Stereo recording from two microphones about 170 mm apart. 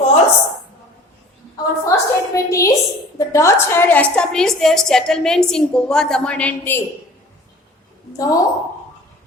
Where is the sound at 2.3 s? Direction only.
20° left (ahead or behind).